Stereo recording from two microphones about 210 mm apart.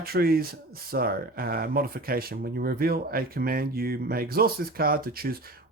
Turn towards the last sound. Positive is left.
turn(degrees=-45)  # may be behind; listen again after turning